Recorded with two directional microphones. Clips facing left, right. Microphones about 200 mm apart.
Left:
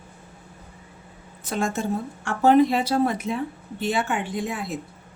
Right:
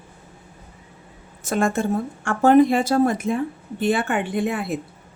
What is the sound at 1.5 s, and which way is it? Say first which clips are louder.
A woman's voice: right 4 dB; 55° right (ahead or behind).